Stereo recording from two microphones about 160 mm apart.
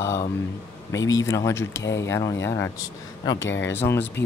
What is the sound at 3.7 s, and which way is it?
Speech, 15° left (ahead or behind).